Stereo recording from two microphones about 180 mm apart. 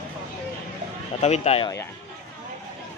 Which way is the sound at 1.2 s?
35° left (ahead or behind).